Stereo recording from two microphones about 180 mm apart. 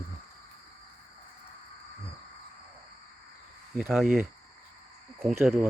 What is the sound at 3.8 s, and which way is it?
Speech, 5° right (ahead or behind).